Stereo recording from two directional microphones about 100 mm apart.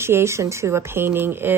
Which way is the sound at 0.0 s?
25° right (ahead or behind).